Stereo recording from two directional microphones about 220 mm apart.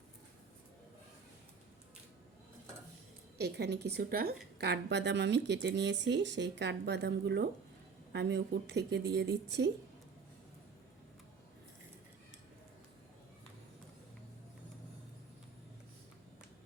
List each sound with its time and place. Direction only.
3.3 s a woman's voice: 50° right (ahead or behind)